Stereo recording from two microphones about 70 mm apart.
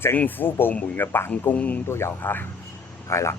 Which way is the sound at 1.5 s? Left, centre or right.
Left.